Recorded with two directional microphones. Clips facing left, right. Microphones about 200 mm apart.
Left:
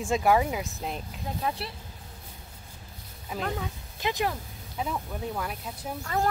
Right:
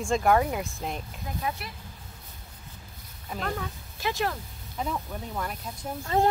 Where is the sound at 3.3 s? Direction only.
10° left (ahead or behind).